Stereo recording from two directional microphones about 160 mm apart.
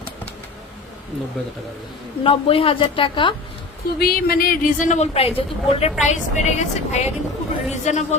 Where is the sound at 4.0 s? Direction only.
70° left (ahead or behind).